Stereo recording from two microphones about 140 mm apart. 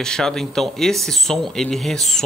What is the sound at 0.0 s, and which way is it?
Speech, 5° left (ahead or behind).